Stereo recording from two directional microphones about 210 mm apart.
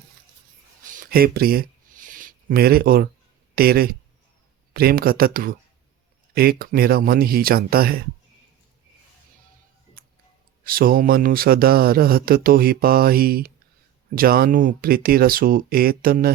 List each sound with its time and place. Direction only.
0.9 s a sound: 40° right (ahead or behind)
3.5 s speech: 45° right (ahead or behind)
10.6 s speech: 45° right (ahead or behind)